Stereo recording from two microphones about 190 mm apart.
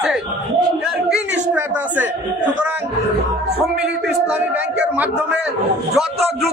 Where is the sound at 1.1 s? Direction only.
10° right (ahead or behind).